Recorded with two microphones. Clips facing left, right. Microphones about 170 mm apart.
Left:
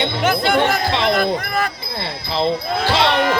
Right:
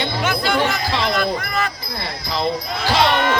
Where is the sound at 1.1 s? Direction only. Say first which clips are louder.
Left 2 dB; 50° left (ahead or behind).